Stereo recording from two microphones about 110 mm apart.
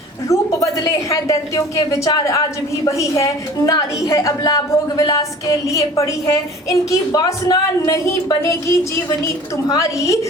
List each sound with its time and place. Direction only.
0.3 s a woman's voice: 30° left (ahead or behind)